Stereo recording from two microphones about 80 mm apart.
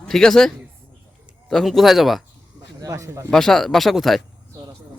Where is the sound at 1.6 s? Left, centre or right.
Centre.